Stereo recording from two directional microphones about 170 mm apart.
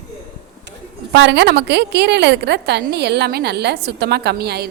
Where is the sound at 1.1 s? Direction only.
85° right.